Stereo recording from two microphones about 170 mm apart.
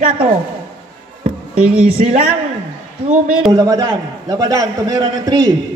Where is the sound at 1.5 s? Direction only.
5° right (ahead or behind).